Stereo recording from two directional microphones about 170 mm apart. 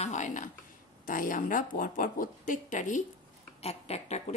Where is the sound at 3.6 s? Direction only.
35° left (ahead or behind).